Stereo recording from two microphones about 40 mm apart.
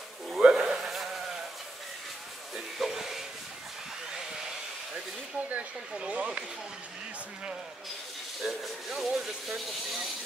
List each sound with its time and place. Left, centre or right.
0.4 s insect: centre
0.8 s insect: centre
2.8 s music: centre
5.5 s speech: right
8.4 s speech: centre